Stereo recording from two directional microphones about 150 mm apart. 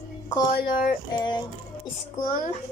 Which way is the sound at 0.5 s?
70° left (ahead or behind).